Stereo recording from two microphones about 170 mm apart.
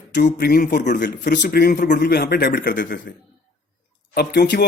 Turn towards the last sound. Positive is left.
turn(degrees=80)